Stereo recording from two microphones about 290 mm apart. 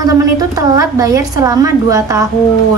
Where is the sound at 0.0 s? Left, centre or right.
Centre.